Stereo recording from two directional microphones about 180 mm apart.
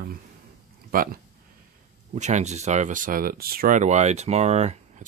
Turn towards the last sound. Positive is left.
turn(degrees=-40)  # may be behind; listen again after turning